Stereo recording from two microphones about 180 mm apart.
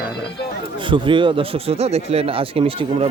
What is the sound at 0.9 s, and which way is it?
Speech, 25° right (ahead or behind).